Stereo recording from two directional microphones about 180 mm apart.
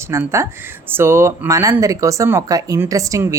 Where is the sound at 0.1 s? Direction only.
15° right (ahead or behind).